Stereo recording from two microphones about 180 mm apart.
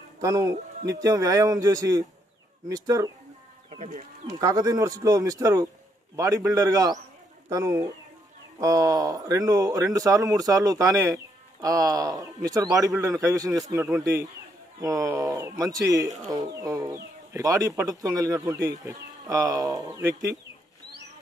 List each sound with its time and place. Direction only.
0.2 s speech: 20° right (ahead or behind)
3.7 s speech: 35° right (ahead or behind)
4.3 s speech: 20° right (ahead or behind)